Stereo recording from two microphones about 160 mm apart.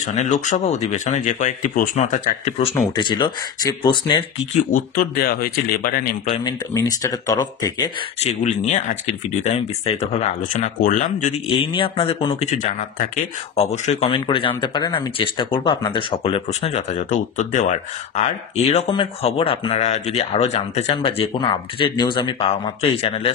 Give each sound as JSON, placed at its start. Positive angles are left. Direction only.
{"t": 0.0, "sound": "speech", "side_deg": 45}
{"t": 3.0, "sound": "speech", "side_deg": 30}
{"t": 4.6, "sound": "speech", "side_deg": 60}
{"t": 6.4, "sound": "speech", "side_deg": 20}
{"t": 8.2, "sound": "speech", "side_deg": 45}
{"t": 11.5, "sound": "speech", "side_deg": 30}
{"t": 12.4, "sound": "speech", "side_deg": 45}
{"t": 18.9, "sound": "speech", "side_deg": 35}